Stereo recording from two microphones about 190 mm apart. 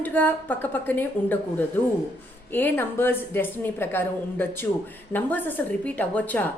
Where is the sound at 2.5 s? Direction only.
10° left (ahead or behind).